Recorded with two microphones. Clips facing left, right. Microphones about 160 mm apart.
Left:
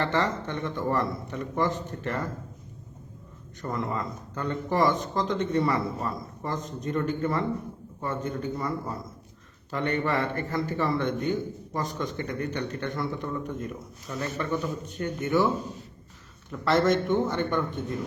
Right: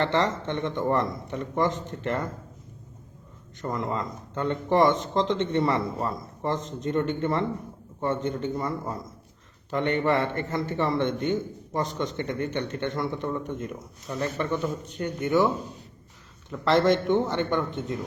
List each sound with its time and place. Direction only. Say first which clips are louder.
0.0 s a man's voice: right 2 dB; 20° right (ahead or behind)
3.6 s a man's voice: right 1 dB; 20° right (ahead or behind)
16.5 s a man's voice: right 2 dB; 20° right (ahead or behind)